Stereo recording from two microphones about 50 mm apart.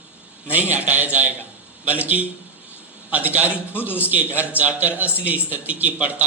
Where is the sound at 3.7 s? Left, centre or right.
Left.